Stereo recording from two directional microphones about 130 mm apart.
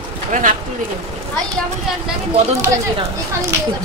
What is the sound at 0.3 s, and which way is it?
Speech, 80° right.